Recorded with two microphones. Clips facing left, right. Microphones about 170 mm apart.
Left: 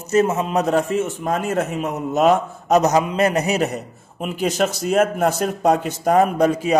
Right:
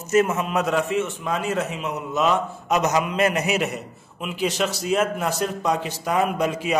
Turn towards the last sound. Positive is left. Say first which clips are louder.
# left 5 dB
turn(degrees=40)  # may be behind; listen again after turning